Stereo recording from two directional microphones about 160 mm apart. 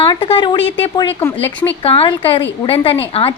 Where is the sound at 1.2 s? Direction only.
15° left (ahead or behind).